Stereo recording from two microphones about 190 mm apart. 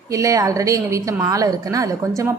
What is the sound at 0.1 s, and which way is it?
Speech, 15° right (ahead or behind).